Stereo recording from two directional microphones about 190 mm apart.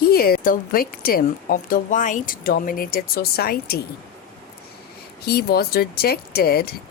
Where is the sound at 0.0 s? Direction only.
50° left (ahead or behind).